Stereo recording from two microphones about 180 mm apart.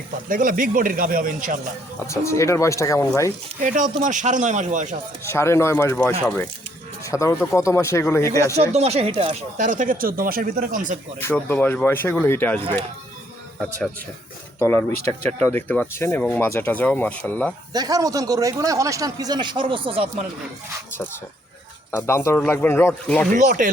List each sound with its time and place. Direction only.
0.3 s speech: 50° right (ahead or behind)
2.0 s speech: 15° left (ahead or behind)
3.6 s speech: 45° right (ahead or behind)
5.2 s speech: 15° left (ahead or behind)
8.5 s speech: 35° right (ahead or behind)
11.2 s speech: 15° left (ahead or behind)
14.6 s speech: 10° left (ahead or behind)
17.7 s a man's voice: 20° right (ahead or behind)
21.9 s speech: 15° left (ahead or behind)
23.3 s speech: 45° right (ahead or behind)